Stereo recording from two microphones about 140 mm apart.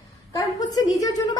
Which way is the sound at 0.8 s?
25° left (ahead or behind).